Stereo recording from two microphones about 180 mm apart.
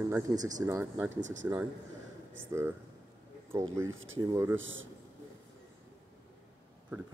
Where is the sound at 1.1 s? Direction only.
45° right (ahead or behind).